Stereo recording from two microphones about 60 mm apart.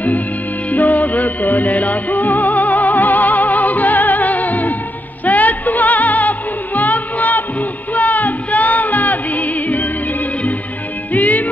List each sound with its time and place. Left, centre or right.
0.7 s music: left
11.1 s music: left